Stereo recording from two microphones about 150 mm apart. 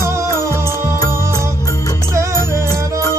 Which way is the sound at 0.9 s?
25° left (ahead or behind).